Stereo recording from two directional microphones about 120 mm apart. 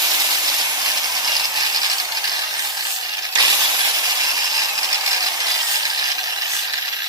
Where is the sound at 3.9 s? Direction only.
30° right (ahead or behind).